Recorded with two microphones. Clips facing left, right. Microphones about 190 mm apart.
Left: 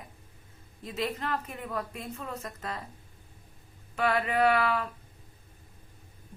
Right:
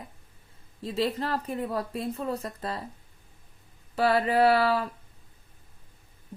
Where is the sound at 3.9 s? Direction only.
35° right (ahead or behind).